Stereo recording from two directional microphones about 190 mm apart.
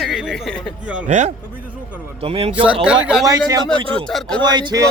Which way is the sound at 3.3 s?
20° right (ahead or behind).